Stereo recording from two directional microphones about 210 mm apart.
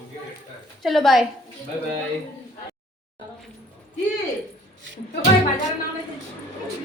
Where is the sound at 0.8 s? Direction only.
Centre (ahead or behind).